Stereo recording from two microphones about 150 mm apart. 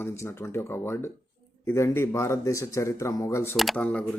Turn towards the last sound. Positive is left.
turn(degrees=10)  # may be behind; listen again after turning